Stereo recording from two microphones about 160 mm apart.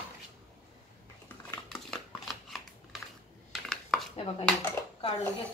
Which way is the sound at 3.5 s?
Centre (ahead or behind).